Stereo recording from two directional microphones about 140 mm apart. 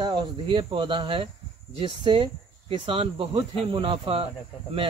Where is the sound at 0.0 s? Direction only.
30° right (ahead or behind).